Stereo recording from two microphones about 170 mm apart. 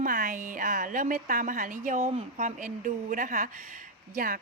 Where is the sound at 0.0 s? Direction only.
55° right (ahead or behind).